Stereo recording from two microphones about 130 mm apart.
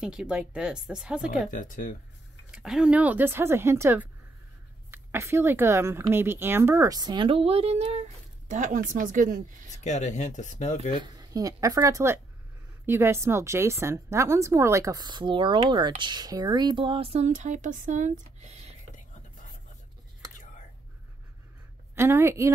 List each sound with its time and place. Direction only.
0.0 s speech: 5° right (ahead or behind)
1.5 s speech: 90° left
2.5 s speech: 5° right (ahead or behind); by 9.7 s 90° right
9.7 s speech: 65° left (ahead or behind)
11.1 s a woman's voice: 25° right (ahead or behind); by 18.8 s 60° right (ahead or behind)
21.9 s a woman's voice: 20° right (ahead or behind)